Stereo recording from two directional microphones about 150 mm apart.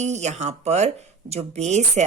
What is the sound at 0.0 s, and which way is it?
Speech, 50° right (ahead or behind).